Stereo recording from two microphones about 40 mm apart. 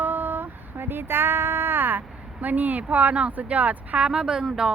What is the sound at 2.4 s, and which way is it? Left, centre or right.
Speech, right.